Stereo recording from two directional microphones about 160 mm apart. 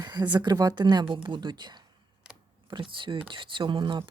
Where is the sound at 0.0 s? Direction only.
25° right (ahead or behind).